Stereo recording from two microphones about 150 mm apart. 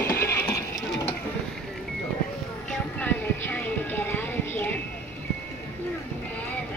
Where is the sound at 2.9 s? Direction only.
10° left (ahead or behind).